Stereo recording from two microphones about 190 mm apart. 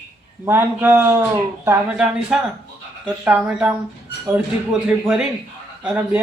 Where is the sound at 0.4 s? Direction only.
10° right (ahead or behind).